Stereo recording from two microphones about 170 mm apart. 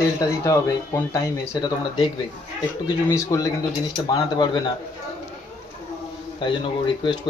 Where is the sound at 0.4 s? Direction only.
20° left (ahead or behind).